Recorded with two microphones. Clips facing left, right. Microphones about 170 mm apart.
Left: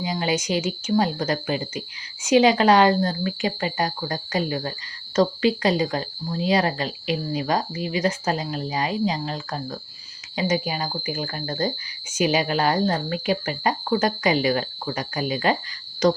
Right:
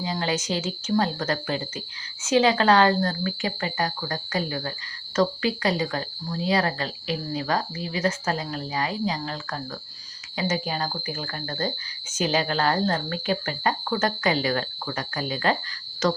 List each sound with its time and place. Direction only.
0.0 s speech: 15° left (ahead or behind)